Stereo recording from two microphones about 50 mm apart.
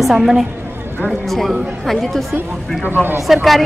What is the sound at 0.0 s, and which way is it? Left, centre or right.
A woman's voice, centre.